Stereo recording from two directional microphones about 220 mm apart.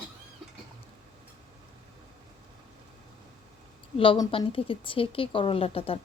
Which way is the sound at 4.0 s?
20° left (ahead or behind).